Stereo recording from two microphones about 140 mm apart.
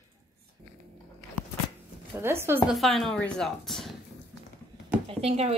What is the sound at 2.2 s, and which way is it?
Speech, 15° right (ahead or behind).